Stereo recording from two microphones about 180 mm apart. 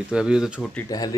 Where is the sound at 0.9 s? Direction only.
20° left (ahead or behind).